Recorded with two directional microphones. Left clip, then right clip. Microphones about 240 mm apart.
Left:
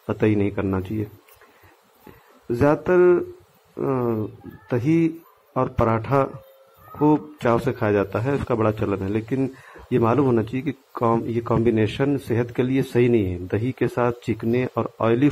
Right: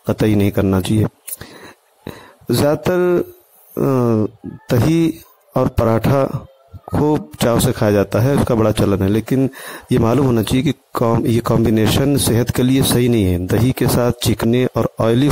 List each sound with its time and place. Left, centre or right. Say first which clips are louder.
0.0 s speech: right 5 dB; right
2.6 s speech: right 1 dB; right